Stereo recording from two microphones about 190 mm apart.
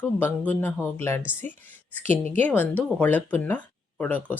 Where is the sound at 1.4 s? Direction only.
35° right (ahead or behind).